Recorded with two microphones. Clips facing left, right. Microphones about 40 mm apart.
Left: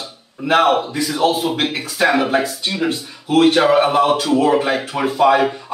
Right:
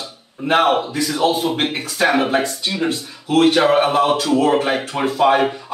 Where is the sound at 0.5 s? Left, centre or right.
Right.